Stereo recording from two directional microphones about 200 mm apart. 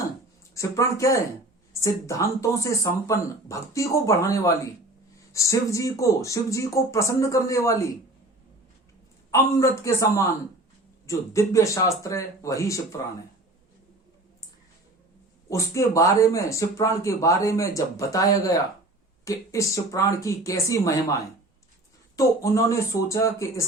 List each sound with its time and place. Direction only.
0.5 s speech: 15° left (ahead or behind)
9.3 s speech: 15° left (ahead or behind)
15.4 s speech: 15° left (ahead or behind)